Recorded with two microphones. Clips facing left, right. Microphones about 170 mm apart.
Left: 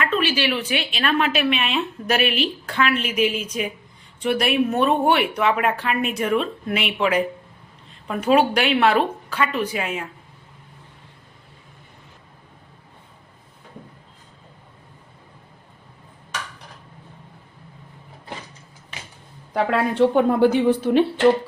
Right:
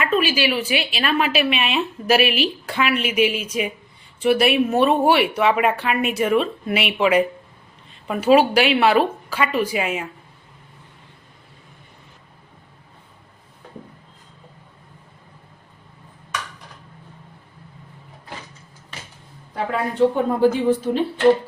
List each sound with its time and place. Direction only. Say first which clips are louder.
0.0 s a woman's voice: right 2 dB; 10° right (ahead or behind)
19.5 s a woman's voice: left 2 dB; 80° left